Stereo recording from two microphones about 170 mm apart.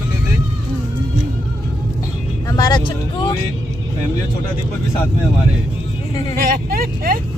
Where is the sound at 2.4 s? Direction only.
20° left (ahead or behind).